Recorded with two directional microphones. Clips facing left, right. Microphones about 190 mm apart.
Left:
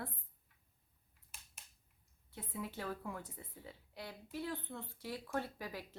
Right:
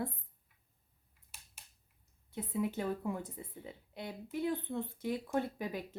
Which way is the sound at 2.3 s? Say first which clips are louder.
Right 9 dB; 20° right (ahead or behind).